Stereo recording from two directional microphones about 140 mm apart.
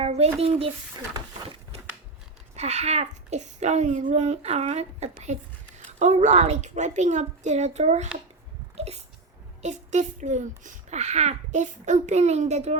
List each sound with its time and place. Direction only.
0.0 s speech: 50° right (ahead or behind)
2.6 s a child's voice: 55° right (ahead or behind)